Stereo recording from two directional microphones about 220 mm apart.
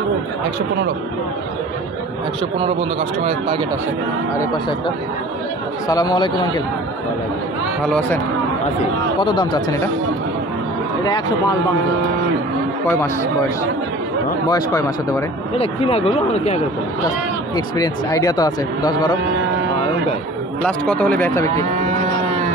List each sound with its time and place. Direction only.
2.6 s a man's voice: 25° right (ahead or behind)
5.9 s speech: 15° left (ahead or behind)
7.8 s speech: 5° left (ahead or behind)
9.2 s speech: 20° left (ahead or behind)
12.8 s speech: 15° left (ahead or behind)
14.5 s speech: 15° left (ahead or behind)
15.5 s speech: 25° left (ahead or behind)
17.7 s speech: 15° left (ahead or behind)
20.6 s speech: 5° left (ahead or behind)